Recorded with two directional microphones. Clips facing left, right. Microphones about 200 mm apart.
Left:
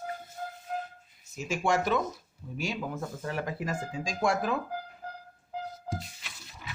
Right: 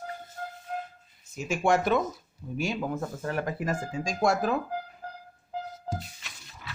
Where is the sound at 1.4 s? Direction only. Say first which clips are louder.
Right 3 dB; 55° right (ahead or behind).